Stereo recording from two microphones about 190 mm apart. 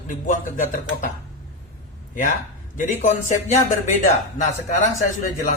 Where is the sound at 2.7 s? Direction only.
45° left (ahead or behind).